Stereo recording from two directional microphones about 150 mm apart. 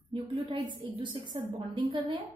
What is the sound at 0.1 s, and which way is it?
A woman's voice, 30° right (ahead or behind).